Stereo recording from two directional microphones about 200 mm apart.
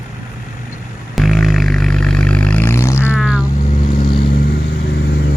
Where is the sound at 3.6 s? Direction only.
40° left (ahead or behind); by 5.3 s 55° left (ahead or behind).